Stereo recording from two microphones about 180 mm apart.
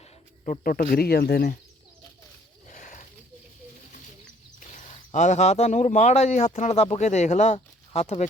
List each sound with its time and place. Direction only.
0.0 s speech: 45° left (ahead or behind); by 1.5 s 60° left (ahead or behind)
2.6 s a sound: 50° left (ahead or behind)
4.8 s speech: 40° left (ahead or behind)